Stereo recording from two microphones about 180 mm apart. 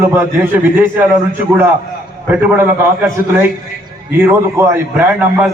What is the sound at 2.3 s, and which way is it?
A man's voice, 10° right (ahead or behind).